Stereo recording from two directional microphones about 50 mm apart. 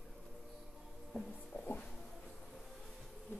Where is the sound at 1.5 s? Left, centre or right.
Left.